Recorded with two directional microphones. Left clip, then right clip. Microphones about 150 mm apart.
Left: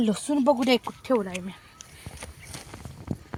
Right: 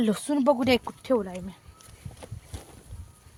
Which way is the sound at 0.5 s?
15° left (ahead or behind).